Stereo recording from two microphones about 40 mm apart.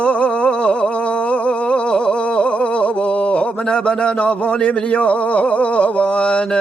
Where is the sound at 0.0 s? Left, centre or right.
Left.